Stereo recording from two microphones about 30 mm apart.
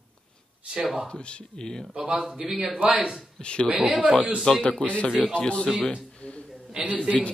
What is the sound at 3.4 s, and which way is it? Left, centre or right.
Speech, left.